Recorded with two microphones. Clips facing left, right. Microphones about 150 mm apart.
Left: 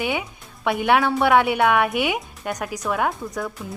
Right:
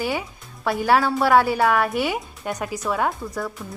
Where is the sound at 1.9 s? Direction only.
15° left (ahead or behind).